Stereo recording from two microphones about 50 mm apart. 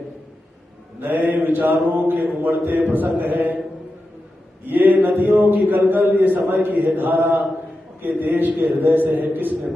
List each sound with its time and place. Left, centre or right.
1.0 s a man's voice: right
1.9 s a sound: right
2.4 s a man's voice: right
4.6 s a man's voice: right